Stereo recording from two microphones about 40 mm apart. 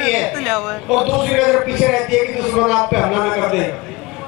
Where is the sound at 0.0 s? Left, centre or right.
Centre.